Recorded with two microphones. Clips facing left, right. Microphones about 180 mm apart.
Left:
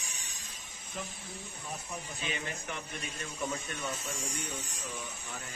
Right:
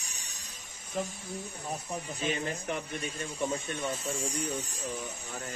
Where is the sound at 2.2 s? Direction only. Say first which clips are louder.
Right 7 dB; 40° right (ahead or behind).